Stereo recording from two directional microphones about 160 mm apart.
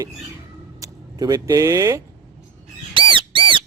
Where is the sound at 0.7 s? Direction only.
20° right (ahead or behind).